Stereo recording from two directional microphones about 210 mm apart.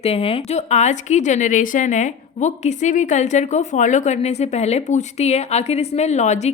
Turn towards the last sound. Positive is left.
turn(degrees=35)  # may be behind; listen again after turning